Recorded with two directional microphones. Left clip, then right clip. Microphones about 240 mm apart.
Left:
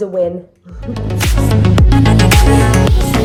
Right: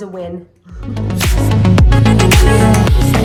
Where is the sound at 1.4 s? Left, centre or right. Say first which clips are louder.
Left 1 dB; centre.